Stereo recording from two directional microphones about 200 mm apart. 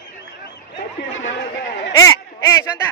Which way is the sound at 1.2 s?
65° left (ahead or behind).